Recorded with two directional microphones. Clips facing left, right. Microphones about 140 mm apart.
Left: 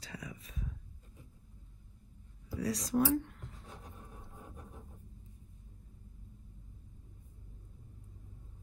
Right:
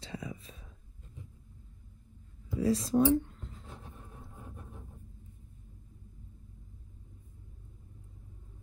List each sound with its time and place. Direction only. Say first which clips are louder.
0.0 s whispering: right 5 dB; 25° right (ahead or behind)
2.6 s writing: right 5 dB; 30° right (ahead or behind)
4.6 s a sound: right 2 dB; centre (ahead or behind)